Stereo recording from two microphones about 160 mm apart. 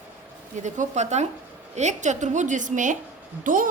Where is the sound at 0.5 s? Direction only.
50° right (ahead or behind).